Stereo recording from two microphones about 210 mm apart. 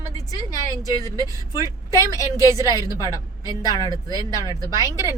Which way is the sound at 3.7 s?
20° left (ahead or behind).